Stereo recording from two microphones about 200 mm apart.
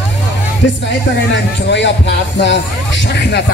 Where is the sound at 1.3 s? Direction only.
60° left (ahead or behind).